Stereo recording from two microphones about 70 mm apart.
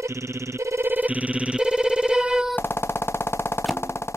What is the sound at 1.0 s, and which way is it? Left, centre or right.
Telephone bell ringing, right.